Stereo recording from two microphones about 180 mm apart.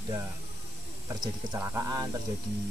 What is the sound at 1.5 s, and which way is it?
Speech, 20° right (ahead or behind).